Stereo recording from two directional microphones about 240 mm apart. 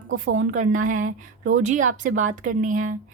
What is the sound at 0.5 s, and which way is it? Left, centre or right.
Speech, right.